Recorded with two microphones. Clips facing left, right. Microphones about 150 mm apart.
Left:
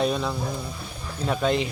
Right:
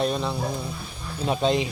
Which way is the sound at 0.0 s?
Centre (ahead or behind).